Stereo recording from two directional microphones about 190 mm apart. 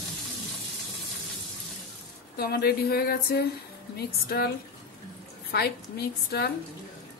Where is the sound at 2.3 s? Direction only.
55° left (ahead or behind).